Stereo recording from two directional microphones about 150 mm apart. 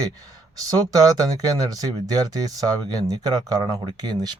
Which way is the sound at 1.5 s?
25° right (ahead or behind).